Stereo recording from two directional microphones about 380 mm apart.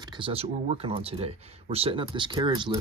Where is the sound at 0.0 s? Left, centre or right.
Centre.